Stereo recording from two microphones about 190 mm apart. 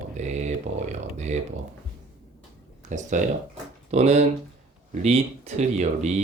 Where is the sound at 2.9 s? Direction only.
45° right (ahead or behind).